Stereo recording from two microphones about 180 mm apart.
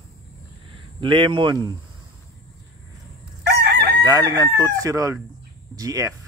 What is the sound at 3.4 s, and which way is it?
Chicken, 65° right (ahead or behind).